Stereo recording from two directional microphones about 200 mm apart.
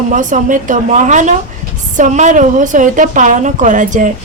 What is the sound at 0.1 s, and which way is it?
A woman's voice, 40° right (ahead or behind).